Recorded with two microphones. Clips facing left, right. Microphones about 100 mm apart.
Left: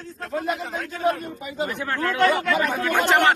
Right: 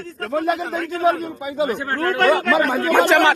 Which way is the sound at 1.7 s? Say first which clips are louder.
Right 4 dB; 40° right (ahead or behind).